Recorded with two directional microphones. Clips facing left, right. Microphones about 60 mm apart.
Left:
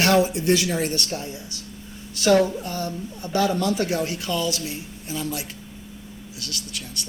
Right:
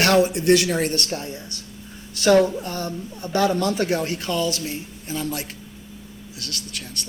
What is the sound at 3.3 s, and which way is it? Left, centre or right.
Speech, right.